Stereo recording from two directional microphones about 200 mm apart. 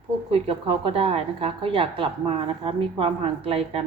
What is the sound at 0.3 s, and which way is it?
A woman's voice, 30° right (ahead or behind).